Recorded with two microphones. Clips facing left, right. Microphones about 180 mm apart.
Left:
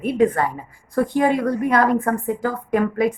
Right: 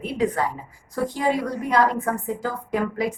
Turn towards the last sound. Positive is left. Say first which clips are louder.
# left 5 dB
turn(degrees=55)  # may be behind; listen again after turning